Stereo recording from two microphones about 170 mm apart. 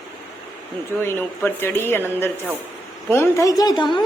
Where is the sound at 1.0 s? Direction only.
15° left (ahead or behind).